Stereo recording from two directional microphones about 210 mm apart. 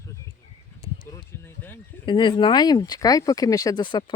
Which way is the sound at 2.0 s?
20° left (ahead or behind).